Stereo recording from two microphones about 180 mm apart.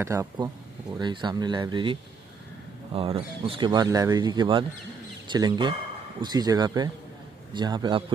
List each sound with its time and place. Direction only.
0.0 s speech: 15° right (ahead or behind)